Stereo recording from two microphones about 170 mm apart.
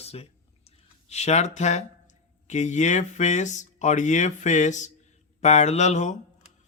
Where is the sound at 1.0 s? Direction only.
40° left (ahead or behind).